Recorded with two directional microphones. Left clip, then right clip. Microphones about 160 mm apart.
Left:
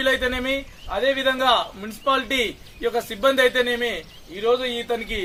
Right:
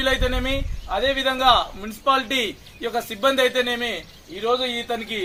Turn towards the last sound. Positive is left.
turn(degrees=15)  # may be behind; listen again after turning